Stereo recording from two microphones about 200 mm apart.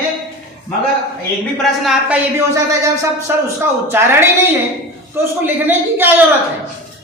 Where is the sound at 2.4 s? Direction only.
15° right (ahead or behind).